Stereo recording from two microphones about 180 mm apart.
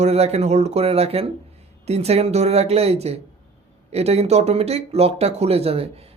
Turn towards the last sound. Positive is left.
turn(degrees=-35)  # may be behind; listen again after turning